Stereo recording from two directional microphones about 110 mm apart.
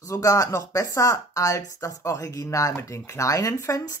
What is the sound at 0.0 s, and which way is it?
Speech, 30° left (ahead or behind).